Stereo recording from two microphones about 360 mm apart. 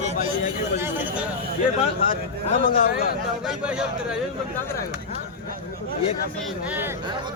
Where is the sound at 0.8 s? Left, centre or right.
Centre.